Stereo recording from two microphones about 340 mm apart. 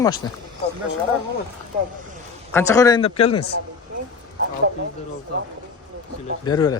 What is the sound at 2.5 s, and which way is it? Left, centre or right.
Speech, centre.